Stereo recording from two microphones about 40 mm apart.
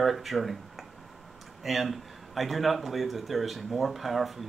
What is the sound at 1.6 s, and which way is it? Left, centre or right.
Speech, centre.